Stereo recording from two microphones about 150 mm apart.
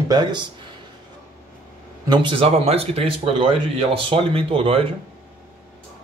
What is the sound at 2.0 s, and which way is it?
Speech, 35° right (ahead or behind).